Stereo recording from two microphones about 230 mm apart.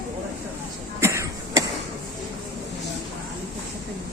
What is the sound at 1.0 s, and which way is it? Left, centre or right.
Cough, centre.